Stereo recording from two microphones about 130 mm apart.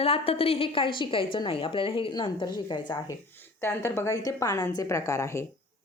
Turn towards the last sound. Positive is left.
turn(degrees=20)  # may be behind; listen again after turning